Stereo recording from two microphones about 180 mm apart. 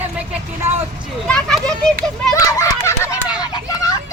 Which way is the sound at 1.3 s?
5° left (ahead or behind).